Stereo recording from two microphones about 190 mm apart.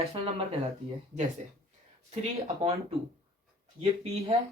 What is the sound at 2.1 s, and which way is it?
Speech, 35° right (ahead or behind).